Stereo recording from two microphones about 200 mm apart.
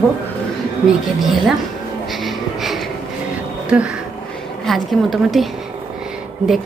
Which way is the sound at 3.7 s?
5° right (ahead or behind).